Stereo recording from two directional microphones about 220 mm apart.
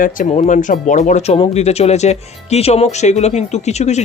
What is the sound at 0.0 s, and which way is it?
Speech, 35° left (ahead or behind).